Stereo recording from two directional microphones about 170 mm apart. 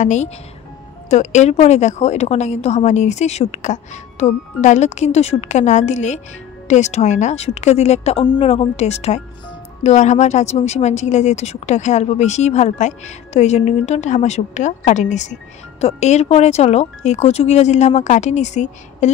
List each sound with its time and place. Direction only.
0.0 s a woman's voice: 45° left (ahead or behind)